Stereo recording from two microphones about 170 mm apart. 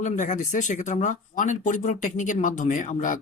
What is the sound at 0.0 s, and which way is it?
Speech, 45° left (ahead or behind).